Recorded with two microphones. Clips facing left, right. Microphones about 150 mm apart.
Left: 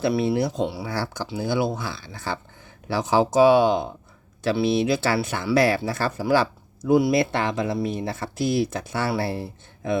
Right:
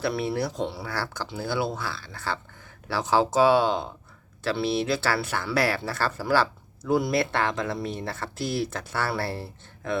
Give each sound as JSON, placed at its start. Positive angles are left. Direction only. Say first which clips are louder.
{"t": 0.2, "sound": "speech", "louder": "left 5 dB", "side_deg": 20}